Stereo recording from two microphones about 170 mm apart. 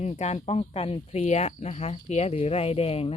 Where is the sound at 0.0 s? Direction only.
40° left (ahead or behind).